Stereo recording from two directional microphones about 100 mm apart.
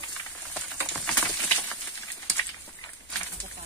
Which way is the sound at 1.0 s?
10° left (ahead or behind).